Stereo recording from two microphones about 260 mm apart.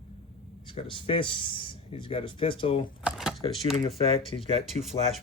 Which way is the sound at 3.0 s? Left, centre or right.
Centre.